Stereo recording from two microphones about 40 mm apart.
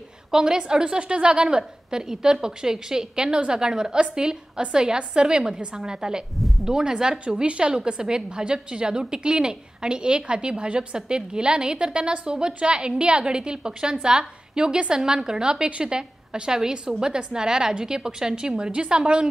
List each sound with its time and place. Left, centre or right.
0.3 s a woman's voice: centre